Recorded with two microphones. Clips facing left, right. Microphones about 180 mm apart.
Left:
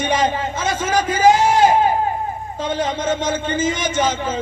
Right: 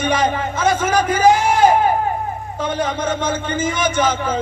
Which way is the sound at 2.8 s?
20° left (ahead or behind).